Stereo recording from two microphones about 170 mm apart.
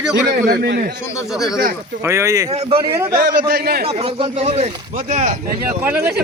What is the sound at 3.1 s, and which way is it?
Speech, 60° right (ahead or behind).